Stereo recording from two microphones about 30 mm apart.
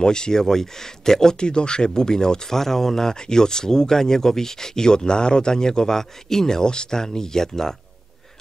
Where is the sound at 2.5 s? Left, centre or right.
Centre.